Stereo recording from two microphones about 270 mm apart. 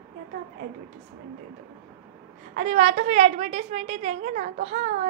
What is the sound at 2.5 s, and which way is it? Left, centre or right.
A woman's voice, right.